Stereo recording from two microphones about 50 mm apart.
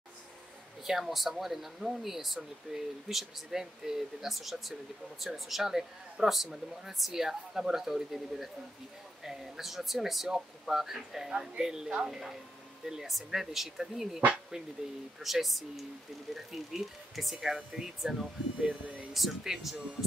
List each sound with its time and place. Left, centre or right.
0.8 s speech: centre
15.2 s speech: centre
19.1 s speech: centre